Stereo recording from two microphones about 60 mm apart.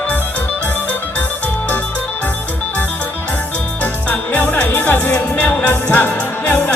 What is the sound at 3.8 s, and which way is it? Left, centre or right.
Music, left.